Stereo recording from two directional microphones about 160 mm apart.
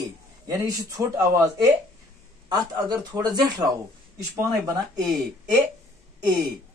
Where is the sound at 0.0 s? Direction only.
20° right (ahead or behind).